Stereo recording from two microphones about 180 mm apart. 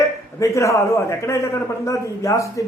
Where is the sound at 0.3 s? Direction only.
15° left (ahead or behind).